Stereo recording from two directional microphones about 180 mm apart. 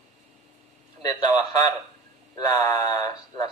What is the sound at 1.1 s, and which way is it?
A man's voice, 20° left (ahead or behind).